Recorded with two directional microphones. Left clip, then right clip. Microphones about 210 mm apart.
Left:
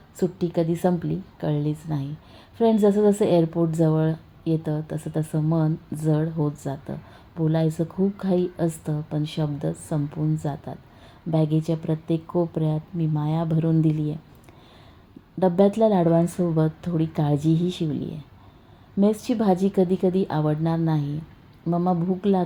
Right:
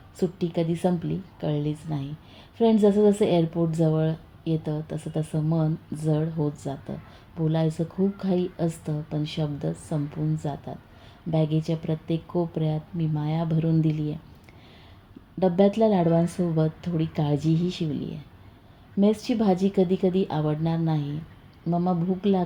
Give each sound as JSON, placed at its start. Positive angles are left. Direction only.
{"t": 0.2, "sound": "a woman's voice", "side_deg": 25}
{"t": 15.4, "sound": "a woman's voice", "side_deg": 25}